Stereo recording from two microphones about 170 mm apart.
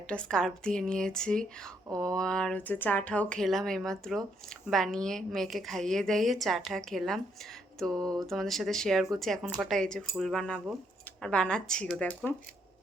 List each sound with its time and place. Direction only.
0.1 s speech: 5° left (ahead or behind)
7.9 s a sound: 20° right (ahead or behind)
8.3 s speech: centre (ahead or behind)